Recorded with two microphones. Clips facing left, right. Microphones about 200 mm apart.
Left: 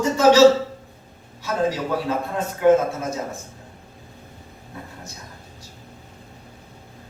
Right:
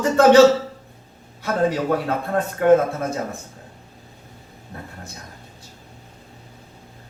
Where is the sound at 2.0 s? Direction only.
60° right (ahead or behind).